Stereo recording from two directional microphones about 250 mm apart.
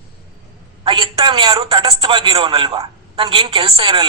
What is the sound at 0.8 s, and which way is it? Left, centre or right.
A man's voice, centre.